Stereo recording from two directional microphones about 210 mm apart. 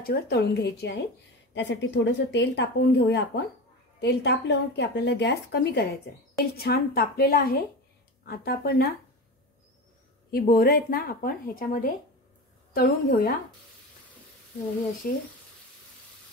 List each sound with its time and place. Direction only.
0.0 s a woman's voice: 50° left (ahead or behind)
10.3 s a woman's voice: 45° left (ahead or behind)